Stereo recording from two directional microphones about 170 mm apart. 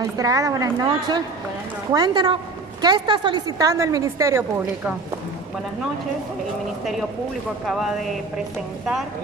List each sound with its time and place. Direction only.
0.2 s a woman's voice: 20° right (ahead or behind)
7.6 s speech: centre (ahead or behind)